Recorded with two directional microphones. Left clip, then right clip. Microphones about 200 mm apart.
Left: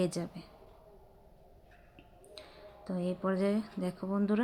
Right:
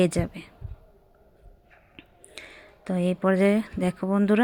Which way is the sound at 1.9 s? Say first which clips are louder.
Right 7 dB; 30° right (ahead or behind).